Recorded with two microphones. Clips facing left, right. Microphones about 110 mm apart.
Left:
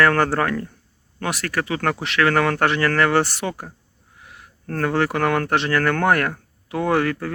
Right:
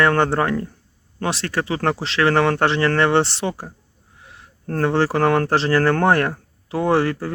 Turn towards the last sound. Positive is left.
turn(degrees=-30)  # may be behind; listen again after turning